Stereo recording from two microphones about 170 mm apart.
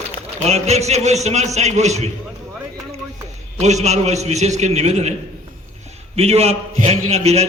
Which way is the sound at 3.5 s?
40° right (ahead or behind).